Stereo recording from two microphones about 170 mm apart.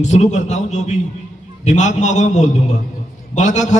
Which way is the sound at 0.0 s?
45° left (ahead or behind).